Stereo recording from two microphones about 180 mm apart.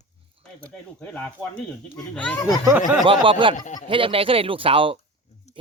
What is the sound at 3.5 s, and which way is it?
Speech, 45° left (ahead or behind).